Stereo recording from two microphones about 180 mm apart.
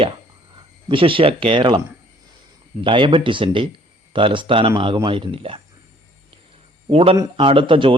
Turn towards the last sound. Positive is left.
turn(degrees=-30)  # may be behind; listen again after turning